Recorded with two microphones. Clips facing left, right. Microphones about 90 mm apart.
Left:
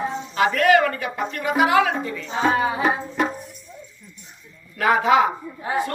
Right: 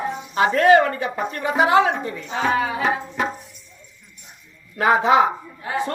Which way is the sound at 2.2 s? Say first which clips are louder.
Left 1 dB; 30° left (ahead or behind).